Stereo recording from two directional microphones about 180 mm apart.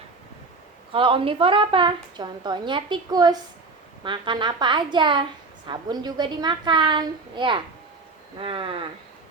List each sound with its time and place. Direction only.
0.9 s a woman's voice: 30° right (ahead or behind)